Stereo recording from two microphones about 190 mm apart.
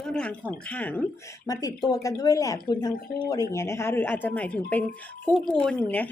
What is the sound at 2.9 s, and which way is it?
Speech, 45° left (ahead or behind).